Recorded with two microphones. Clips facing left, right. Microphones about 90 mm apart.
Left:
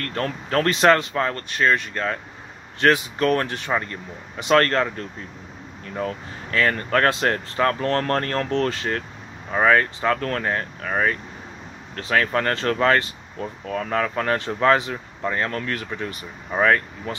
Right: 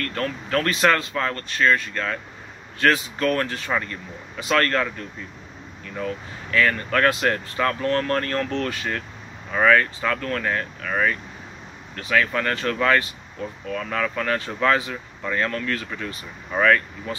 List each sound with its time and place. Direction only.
0.0 s speech: 35° left (ahead or behind)
5.9 s speech: 35° left (ahead or behind)